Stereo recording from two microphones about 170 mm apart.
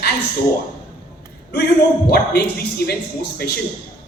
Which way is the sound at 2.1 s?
65° left (ahead or behind).